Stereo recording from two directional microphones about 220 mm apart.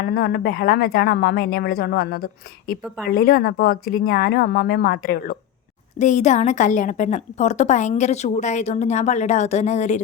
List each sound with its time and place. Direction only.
0.0 s a woman's voice: 45° left (ahead or behind)